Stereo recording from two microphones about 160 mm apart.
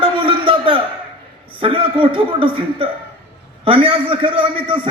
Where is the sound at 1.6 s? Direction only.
35° right (ahead or behind).